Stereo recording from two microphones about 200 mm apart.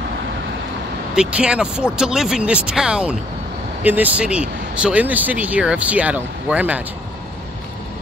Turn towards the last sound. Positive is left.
turn(degrees=-5)  # may be behind; listen again after turning